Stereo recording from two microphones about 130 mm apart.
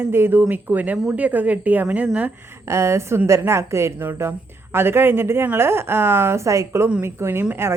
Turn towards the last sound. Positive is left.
turn(degrees=-20)  # may be behind; listen again after turning